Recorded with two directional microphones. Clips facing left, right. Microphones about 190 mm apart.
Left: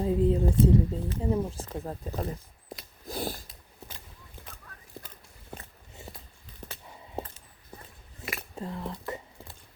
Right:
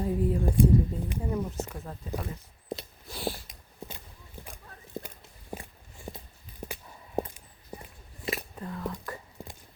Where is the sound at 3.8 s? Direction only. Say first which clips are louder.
Right 5 dB; 15° right (ahead or behind).